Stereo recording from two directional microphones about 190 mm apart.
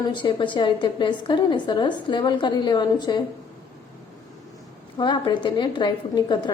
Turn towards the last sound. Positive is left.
turn(degrees=25)  # may be behind; listen again after turning